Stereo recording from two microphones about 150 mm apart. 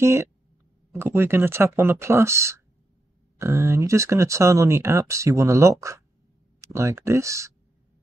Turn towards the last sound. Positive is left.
turn(degrees=-20)  # may be behind; listen again after turning